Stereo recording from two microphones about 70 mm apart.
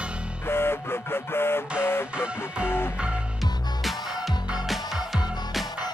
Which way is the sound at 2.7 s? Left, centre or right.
Left.